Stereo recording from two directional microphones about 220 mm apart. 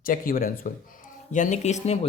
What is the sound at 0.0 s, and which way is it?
Speech, 40° left (ahead or behind).